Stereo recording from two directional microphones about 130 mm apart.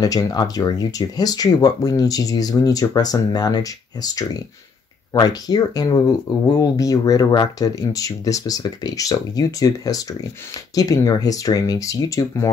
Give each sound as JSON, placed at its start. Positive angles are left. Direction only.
{"t": 0.0, "sound": "speech", "side_deg": 30}